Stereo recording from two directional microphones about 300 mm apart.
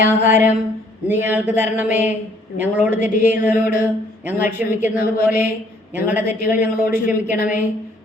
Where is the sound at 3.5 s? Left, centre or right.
Left.